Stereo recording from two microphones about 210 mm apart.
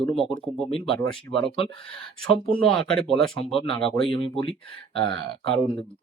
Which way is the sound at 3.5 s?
25° left (ahead or behind).